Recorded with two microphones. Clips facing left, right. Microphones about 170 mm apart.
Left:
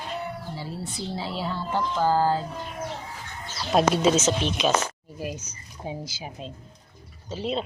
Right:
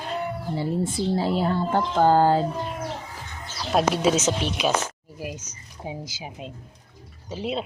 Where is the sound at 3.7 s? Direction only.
5° right (ahead or behind).